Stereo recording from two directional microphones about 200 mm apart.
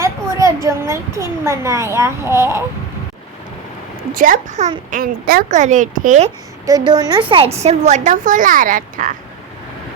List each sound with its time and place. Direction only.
0.0 s a woman's voice: 15° right (ahead or behind)
4.1 s a woman's voice: 45° right (ahead or behind)
6.7 s speech: 20° right (ahead or behind); by 9.1 s 40° right (ahead or behind)